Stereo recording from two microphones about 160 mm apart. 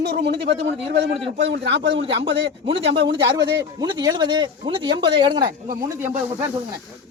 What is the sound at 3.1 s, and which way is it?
Speech, 25° right (ahead or behind).